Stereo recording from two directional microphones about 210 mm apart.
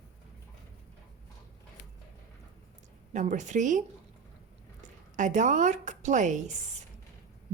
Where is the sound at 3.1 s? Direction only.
35° right (ahead or behind).